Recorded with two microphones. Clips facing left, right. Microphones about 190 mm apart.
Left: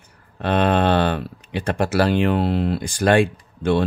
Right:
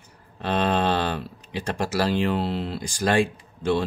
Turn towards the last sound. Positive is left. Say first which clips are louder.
# left 4 dB
turn(degrees=60)  # may be behind; listen again after turning